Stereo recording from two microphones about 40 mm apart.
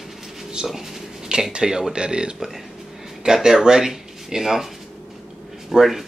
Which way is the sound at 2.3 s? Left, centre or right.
Centre.